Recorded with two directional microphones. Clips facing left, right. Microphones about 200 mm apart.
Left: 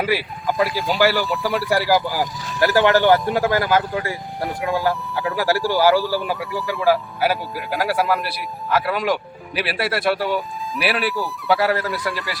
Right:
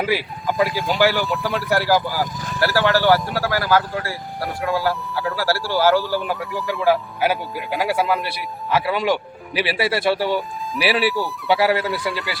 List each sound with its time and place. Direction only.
0.0 s speech: centre (ahead or behind)
1.6 s speech: 15° left (ahead or behind)
6.2 s speech: centre (ahead or behind)